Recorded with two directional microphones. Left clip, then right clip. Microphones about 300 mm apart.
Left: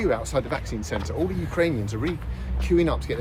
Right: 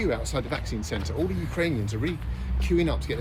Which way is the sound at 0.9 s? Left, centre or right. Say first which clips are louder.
Left 3 dB; centre.